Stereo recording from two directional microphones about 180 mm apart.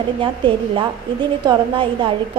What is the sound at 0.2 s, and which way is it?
A woman's voice, 25° right (ahead or behind).